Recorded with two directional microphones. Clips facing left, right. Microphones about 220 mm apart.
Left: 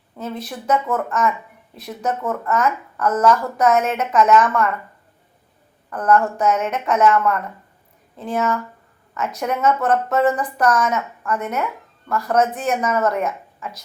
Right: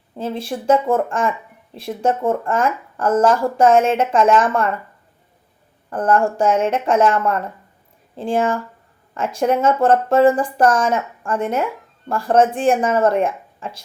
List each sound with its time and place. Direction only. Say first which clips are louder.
0.2 s speech: right 4 dB; 30° right (ahead or behind)
5.9 s speech: right 1 dB; 30° right (ahead or behind)